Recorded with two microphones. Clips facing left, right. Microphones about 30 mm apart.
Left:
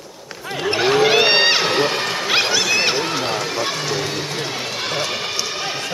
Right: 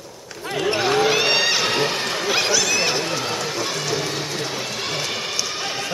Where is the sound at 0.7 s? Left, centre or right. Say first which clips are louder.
Left 3 dB; centre.